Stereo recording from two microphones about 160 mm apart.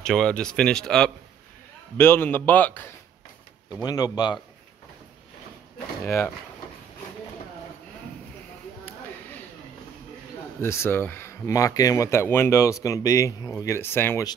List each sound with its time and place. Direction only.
0.0 s speech: 5° left (ahead or behind)
2.0 s a man's voice: 15° left (ahead or behind)
3.8 s speech: 25° left (ahead or behind)
6.0 s a man's voice: 15° left (ahead or behind)
10.6 s speech: 15° left (ahead or behind)